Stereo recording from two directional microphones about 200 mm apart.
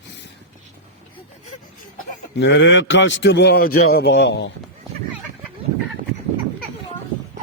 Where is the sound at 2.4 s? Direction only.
65° left (ahead or behind).